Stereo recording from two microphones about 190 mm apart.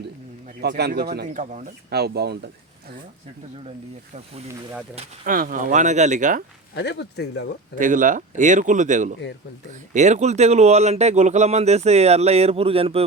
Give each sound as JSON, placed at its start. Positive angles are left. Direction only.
{"t": 0.6, "sound": "speech", "side_deg": -60}
{"t": 1.9, "sound": "speech", "side_deg": -60}
{"t": 4.9, "sound": "speech", "side_deg": -45}
{"t": 6.7, "sound": "speech", "side_deg": 65}
{"t": 7.8, "sound": "speech", "side_deg": -45}